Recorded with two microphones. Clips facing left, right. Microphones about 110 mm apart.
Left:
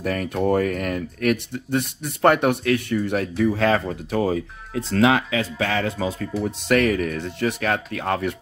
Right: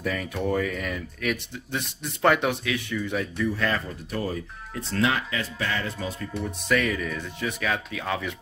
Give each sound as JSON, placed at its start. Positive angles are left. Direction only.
{"t": 0.0, "sound": "speech", "side_deg": 60}
{"t": 3.1, "sound": "speech", "side_deg": 70}
{"t": 3.5, "sound": "speech", "side_deg": 90}
{"t": 6.7, "sound": "speech", "side_deg": 65}